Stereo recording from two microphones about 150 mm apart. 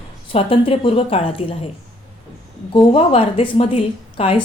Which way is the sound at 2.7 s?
35° left (ahead or behind).